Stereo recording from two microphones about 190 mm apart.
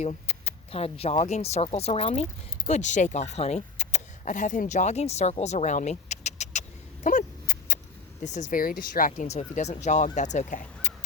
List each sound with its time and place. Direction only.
0.0 s speech: 35° left (ahead or behind)